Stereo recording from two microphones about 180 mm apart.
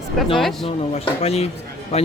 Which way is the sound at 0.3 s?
Centre (ahead or behind).